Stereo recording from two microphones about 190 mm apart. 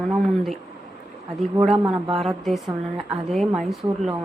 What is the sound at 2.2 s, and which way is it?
A woman's voice, centre (ahead or behind).